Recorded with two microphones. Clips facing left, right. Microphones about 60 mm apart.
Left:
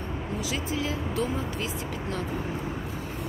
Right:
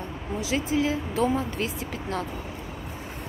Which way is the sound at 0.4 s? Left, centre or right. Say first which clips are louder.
Right 7 dB; right.